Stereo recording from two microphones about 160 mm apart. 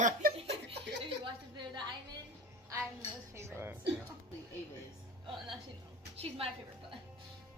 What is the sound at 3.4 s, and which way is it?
Music, 15° right (ahead or behind).